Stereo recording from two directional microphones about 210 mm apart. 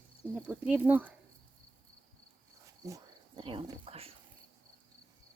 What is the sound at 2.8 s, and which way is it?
Speech, 20° right (ahead or behind).